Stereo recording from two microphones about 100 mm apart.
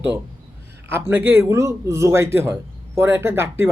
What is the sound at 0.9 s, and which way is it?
Speech, 20° right (ahead or behind).